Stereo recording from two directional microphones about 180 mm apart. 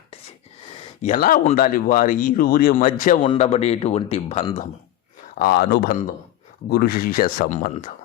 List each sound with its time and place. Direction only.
1.0 s speech: 50° left (ahead or behind)
3.2 s speech: 35° left (ahead or behind)
5.4 s speech: 60° left (ahead or behind)